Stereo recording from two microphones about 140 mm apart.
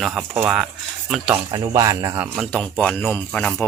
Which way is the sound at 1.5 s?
25° right (ahead or behind).